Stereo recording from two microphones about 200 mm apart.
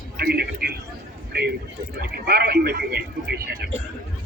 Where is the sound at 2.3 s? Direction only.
50° right (ahead or behind).